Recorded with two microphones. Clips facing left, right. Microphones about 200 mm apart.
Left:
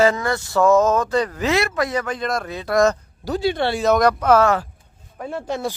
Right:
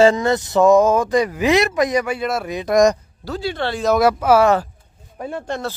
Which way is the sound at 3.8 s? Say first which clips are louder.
Right 1 dB; 5° right (ahead or behind).